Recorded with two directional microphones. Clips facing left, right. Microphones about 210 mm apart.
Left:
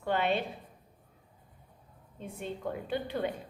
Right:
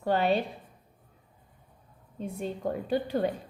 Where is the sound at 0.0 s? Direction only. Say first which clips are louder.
Right 4 dB; 40° right (ahead or behind).